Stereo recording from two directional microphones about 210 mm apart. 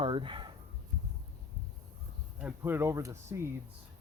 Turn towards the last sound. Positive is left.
turn(degrees=-15)  # may be behind; listen again after turning